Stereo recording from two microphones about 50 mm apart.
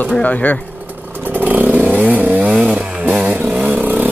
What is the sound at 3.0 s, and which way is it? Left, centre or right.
Vehicle, right.